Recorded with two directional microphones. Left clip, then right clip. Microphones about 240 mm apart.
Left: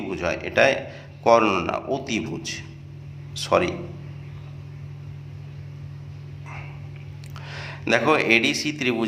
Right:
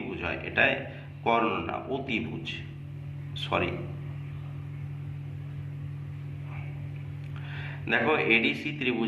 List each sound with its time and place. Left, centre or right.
0.1 s a man's voice: left
7.5 s a man's voice: left